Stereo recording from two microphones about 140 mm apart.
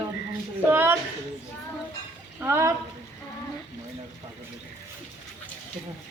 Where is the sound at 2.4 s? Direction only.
15° right (ahead or behind).